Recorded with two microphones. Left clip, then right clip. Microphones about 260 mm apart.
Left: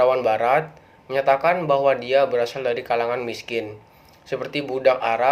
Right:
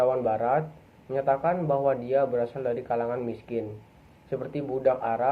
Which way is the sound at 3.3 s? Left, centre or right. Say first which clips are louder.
Left 5 dB; centre.